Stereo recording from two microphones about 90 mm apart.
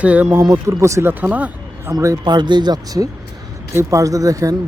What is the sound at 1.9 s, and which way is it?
Speech, 45° right (ahead or behind).